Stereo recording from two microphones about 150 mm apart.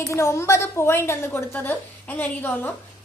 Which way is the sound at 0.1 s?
20° left (ahead or behind).